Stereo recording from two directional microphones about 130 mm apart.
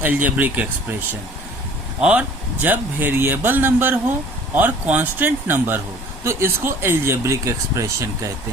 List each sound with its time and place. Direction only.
0.0 s speech: 10° right (ahead or behind)
2.0 s speech: 10° right (ahead or behind); by 8.3 s 25° right (ahead or behind)